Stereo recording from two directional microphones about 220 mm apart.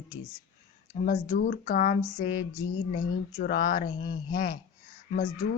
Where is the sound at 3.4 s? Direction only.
40° left (ahead or behind).